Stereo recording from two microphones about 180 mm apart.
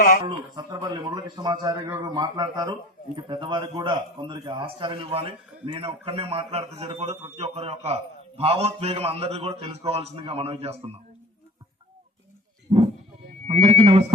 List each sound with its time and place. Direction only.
0.3 s a man's voice: 25° right (ahead or behind)
13.5 s a man's voice: 35° right (ahead or behind)